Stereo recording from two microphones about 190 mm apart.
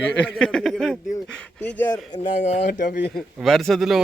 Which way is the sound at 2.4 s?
40° left (ahead or behind).